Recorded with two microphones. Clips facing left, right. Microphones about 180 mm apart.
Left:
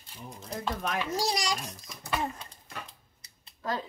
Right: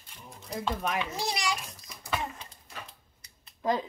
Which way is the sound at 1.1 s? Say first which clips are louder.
Left 2 dB; 40° left (ahead or behind).